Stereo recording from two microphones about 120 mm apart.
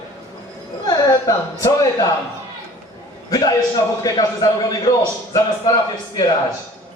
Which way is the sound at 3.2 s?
30° left (ahead or behind).